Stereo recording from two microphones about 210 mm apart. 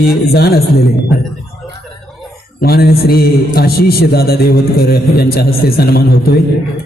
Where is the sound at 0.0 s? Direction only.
50° left (ahead or behind).